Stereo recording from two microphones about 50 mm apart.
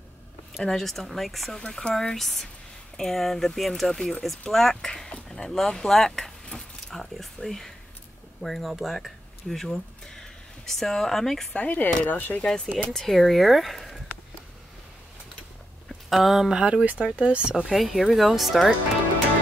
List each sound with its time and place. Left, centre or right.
0.7 s speech: centre
5.3 s keys jangling: centre
8.4 s speech: centre
11.5 s speech: left
12.7 s speech: centre
15.9 s speech: centre
17.0 s speech: right
17.6 s speech: centre